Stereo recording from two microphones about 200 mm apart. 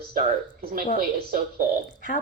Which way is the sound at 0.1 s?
45° right (ahead or behind).